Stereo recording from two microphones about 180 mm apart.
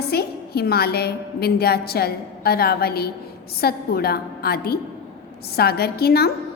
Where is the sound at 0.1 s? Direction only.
60° left (ahead or behind).